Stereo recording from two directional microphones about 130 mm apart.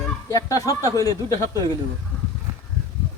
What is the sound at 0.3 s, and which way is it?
Speech, 25° left (ahead or behind).